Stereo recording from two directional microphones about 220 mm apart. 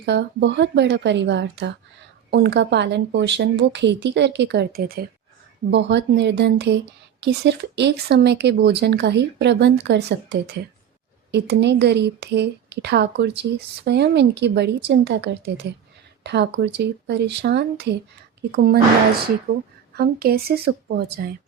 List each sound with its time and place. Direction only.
0.0 s speech: 50° right (ahead or behind)
19.9 s speech: 45° right (ahead or behind)